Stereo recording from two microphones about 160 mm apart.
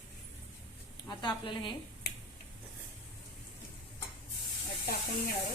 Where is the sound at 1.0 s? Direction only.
30° left (ahead or behind).